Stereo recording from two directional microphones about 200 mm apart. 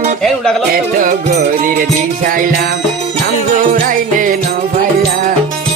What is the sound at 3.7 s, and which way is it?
Music, 40° right (ahead or behind).